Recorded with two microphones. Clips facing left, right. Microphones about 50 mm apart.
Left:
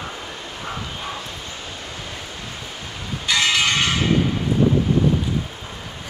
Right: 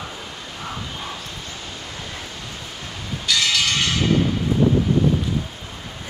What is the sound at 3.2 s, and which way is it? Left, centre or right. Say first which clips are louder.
Church bell: left 2 dB; left.